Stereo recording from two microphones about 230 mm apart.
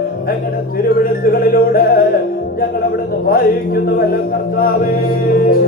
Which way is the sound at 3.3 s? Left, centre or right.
Left.